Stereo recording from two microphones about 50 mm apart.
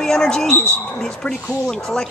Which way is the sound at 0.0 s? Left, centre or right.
Centre.